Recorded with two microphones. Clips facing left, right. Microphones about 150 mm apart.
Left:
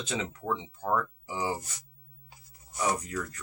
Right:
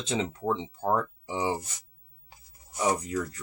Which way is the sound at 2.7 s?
25° right (ahead or behind).